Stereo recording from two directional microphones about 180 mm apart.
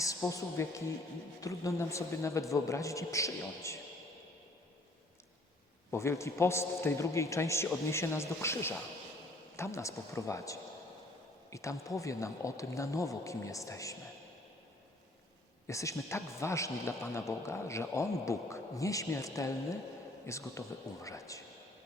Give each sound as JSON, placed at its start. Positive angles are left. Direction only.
{"t": 0.0, "sound": "speech", "side_deg": 15}
{"t": 5.9, "sound": "speech", "side_deg": 15}
{"t": 15.6, "sound": "speech", "side_deg": 15}